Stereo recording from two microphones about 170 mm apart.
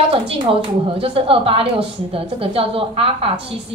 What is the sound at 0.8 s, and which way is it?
A woman's voice, 30° right (ahead or behind).